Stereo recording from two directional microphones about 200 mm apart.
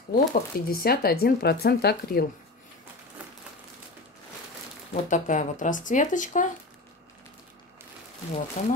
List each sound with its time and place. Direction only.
0.3 s speech: 50° left (ahead or behind)
5.0 s speech: 40° left (ahead or behind)
8.6 s speech: 35° left (ahead or behind)